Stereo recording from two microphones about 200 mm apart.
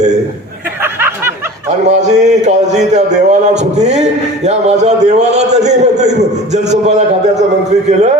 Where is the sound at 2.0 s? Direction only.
35° right (ahead or behind).